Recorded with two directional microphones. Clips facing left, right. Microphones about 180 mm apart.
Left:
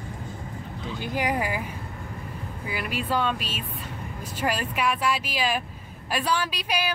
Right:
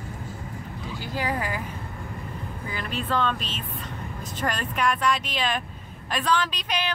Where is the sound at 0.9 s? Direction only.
20° left (ahead or behind).